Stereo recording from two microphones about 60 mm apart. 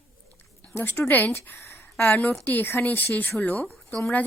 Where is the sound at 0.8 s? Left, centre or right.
Left.